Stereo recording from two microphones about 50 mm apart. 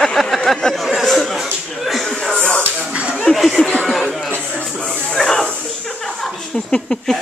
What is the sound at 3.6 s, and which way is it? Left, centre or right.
Speech, centre.